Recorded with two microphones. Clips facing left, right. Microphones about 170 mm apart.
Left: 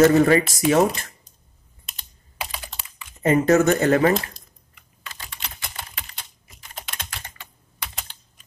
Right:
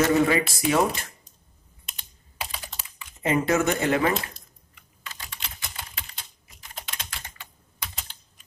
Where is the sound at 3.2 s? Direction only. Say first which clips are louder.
Left 6 dB; 45° left (ahead or behind).